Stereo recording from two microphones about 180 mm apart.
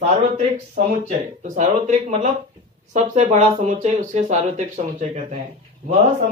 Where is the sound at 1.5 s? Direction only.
40° right (ahead or behind).